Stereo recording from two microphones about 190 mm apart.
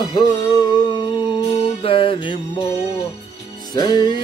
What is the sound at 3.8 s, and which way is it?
Music, 25° left (ahead or behind).